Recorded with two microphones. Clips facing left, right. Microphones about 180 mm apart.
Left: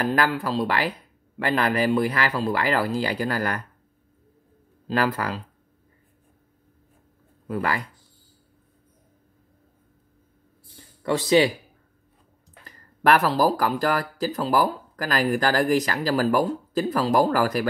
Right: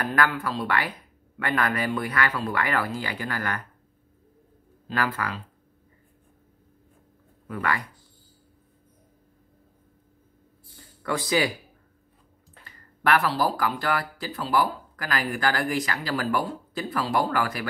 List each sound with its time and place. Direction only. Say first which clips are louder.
0.0 s speech: left 2 dB; 30° left (ahead or behind)
4.8 s speech: left 4 dB; 35° left (ahead or behind)
7.4 s speech: left 2 dB; 30° left (ahead or behind)
11.0 s speech: left 6 dB; 25° left (ahead or behind)
12.6 s speech: left 5 dB; 40° left (ahead or behind)